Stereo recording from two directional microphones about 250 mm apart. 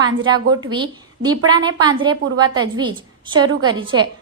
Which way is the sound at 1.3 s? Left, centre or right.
Right.